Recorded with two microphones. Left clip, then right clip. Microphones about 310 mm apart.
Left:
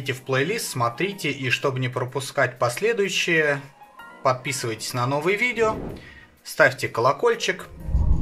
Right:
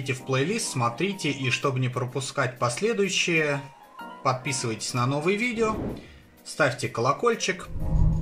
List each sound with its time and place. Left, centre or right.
0.0 s speech: left